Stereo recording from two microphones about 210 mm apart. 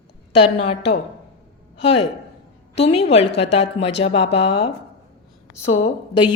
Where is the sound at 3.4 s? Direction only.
30° left (ahead or behind).